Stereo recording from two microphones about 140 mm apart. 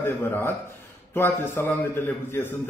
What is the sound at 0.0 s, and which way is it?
A man's voice, 15° left (ahead or behind).